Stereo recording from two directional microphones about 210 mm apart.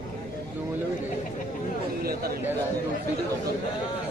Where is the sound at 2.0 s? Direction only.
45° right (ahead or behind).